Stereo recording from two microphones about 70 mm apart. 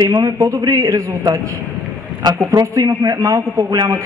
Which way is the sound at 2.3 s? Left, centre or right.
Right.